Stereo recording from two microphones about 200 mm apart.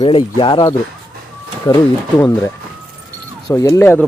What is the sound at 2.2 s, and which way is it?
Speech, 15° left (ahead or behind).